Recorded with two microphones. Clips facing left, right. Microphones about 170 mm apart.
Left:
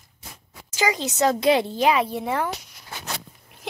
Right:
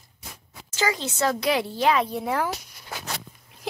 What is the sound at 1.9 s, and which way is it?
Speech, 5° left (ahead or behind).